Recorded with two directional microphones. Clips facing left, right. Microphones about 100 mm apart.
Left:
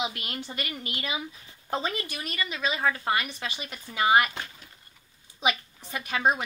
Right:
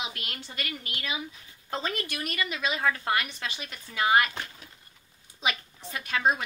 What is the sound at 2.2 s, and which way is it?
Speech, 5° right (ahead or behind).